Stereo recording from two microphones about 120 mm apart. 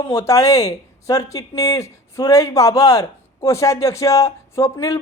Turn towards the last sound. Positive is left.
turn(degrees=25)  # may be behind; listen again after turning